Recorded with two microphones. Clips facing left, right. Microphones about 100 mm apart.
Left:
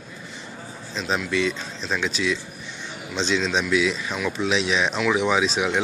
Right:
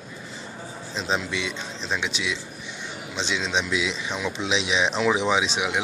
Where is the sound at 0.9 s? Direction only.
25° right (ahead or behind).